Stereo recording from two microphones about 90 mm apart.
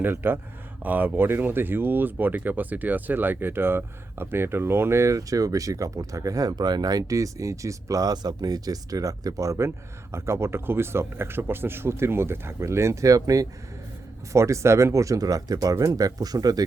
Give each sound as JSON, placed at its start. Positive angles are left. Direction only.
{"t": 0.0, "sound": "speech", "side_deg": -25}